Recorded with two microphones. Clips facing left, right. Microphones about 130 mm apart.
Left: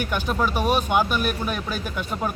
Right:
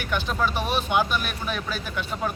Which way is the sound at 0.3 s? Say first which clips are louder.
Left 2 dB; 10° left (ahead or behind).